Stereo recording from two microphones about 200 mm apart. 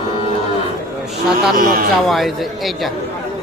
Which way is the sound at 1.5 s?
45° right (ahead or behind).